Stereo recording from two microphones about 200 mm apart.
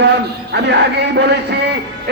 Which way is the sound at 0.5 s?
55° right (ahead or behind).